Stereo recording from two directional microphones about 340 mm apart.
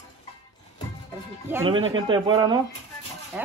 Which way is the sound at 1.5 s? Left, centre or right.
Centre.